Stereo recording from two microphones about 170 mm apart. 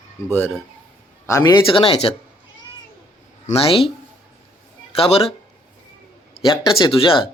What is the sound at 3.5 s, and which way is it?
Speech, 35° left (ahead or behind).